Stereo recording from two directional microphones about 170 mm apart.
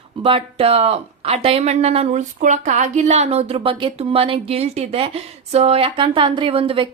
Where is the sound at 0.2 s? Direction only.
35° right (ahead or behind).